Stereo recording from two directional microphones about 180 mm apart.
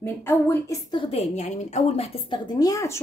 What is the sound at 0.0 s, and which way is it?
Speech, 10° left (ahead or behind).